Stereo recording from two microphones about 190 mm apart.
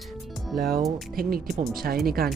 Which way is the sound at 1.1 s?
50° right (ahead or behind).